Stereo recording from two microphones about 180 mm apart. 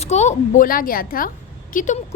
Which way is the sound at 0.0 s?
40° left (ahead or behind).